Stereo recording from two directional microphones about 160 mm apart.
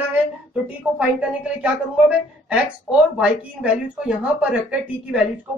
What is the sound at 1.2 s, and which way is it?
Speech, 5° right (ahead or behind).